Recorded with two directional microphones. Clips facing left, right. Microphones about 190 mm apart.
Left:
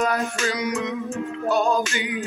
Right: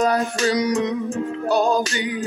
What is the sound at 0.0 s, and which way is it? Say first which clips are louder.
Music: right 4 dB; 35° right (ahead or behind).